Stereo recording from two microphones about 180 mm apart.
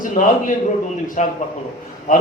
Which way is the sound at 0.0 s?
45° left (ahead or behind).